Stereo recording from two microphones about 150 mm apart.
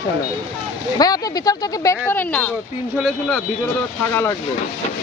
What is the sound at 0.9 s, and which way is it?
Speech, 25° left (ahead or behind).